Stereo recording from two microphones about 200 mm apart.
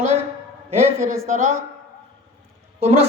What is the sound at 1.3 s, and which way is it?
Speech, 35° right (ahead or behind).